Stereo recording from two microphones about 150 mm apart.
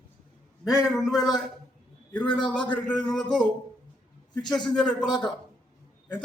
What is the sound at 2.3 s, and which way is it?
Speech, 30° left (ahead or behind).